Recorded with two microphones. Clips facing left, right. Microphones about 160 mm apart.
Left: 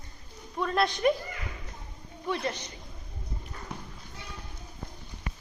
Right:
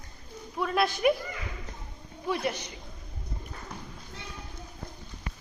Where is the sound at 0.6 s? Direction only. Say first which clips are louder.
Even; 5° right (ahead or behind).